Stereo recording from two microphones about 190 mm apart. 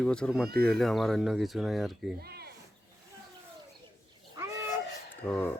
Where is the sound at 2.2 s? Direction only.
55° right (ahead or behind).